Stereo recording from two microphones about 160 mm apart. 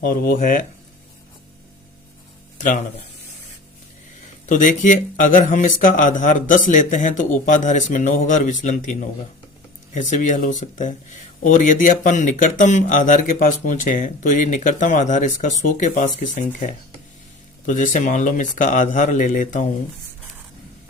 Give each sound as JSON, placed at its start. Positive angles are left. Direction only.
{"t": 0.0, "sound": "speech", "side_deg": 65}
{"t": 2.6, "sound": "speech", "side_deg": 55}
{"t": 4.4, "sound": "speech", "side_deg": 55}